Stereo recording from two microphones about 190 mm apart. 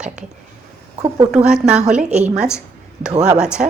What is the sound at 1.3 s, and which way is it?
Speech, 5° right (ahead or behind).